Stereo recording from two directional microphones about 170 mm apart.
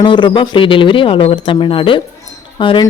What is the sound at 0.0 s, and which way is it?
Speech, 30° left (ahead or behind).